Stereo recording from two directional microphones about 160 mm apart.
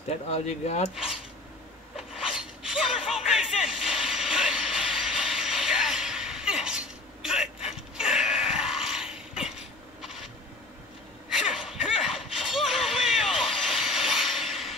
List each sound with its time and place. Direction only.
0.3 s speech: 45° left (ahead or behind)
0.9 s cutlery: 5° right (ahead or behind)
2.0 s chink: centre (ahead or behind)
3.6 s vehicle: 5° right (ahead or behind)
7.7 s a sound: 5° right (ahead or behind)
11.2 s a sound: centre (ahead or behind)